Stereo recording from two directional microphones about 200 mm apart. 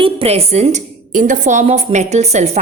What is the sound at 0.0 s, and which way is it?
A woman's voice, 30° right (ahead or behind).